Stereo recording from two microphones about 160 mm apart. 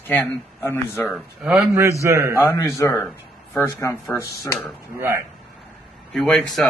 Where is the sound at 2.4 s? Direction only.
15° left (ahead or behind).